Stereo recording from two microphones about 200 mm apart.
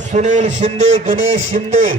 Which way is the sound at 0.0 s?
35° right (ahead or behind).